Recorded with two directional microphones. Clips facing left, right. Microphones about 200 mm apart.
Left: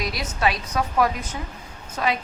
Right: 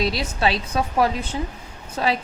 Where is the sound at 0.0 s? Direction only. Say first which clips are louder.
Right 3 dB; 30° right (ahead or behind).